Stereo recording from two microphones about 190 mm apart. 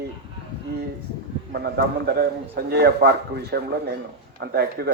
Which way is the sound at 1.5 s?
55° right (ahead or behind).